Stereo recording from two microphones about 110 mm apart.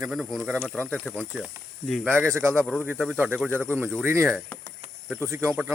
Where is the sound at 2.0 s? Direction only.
15° right (ahead or behind).